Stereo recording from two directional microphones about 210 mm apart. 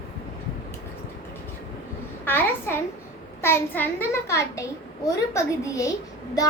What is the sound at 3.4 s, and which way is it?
A child's voice, 10° left (ahead or behind).